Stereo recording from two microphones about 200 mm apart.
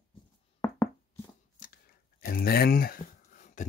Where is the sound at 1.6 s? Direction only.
45° left (ahead or behind).